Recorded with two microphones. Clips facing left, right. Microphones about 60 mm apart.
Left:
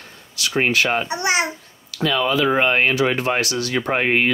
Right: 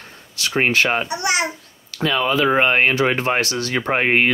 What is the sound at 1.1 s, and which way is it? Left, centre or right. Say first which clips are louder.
Speech: left 1 dB; left.